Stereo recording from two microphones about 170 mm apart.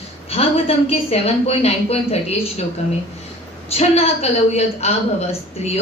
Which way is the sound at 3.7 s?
35° left (ahead or behind).